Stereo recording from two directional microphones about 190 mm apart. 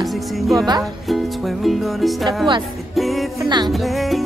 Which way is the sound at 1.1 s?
Centre (ahead or behind).